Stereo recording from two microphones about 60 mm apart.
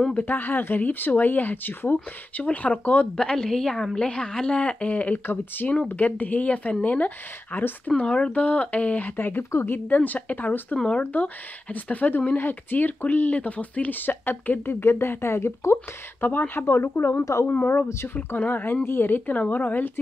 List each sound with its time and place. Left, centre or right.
0.2 s speech: left
3.2 s a woman's voice: centre
5.2 s speech: left
8.0 s speech: centre
9.1 s speech: left
9.8 s speech: left
16.2 s speech: left
17.2 s speech: left
18.0 s speech: left